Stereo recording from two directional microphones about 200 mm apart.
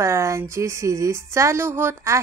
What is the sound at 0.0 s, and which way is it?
Speech, 15° right (ahead or behind).